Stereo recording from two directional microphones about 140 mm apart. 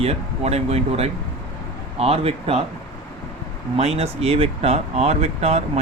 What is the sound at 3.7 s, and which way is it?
Speech, 45° right (ahead or behind).